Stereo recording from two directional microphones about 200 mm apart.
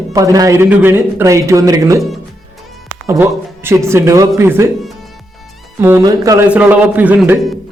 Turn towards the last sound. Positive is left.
turn(degrees=-10)  # may be behind; listen again after turning